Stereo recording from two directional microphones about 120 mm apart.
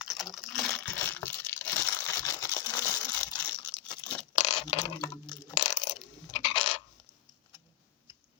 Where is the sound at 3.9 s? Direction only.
35° left (ahead or behind).